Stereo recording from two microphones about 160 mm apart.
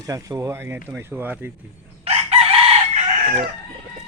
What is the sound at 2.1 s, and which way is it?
Chicken, 40° right (ahead or behind).